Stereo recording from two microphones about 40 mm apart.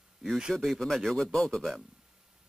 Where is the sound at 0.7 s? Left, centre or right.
Centre.